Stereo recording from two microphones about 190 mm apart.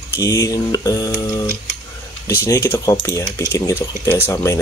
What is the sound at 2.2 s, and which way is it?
Speech, 15° left (ahead or behind).